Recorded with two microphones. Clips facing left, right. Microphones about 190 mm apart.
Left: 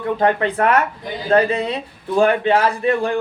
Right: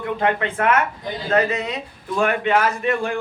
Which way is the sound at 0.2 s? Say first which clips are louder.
Left 4 dB; 35° left (ahead or behind).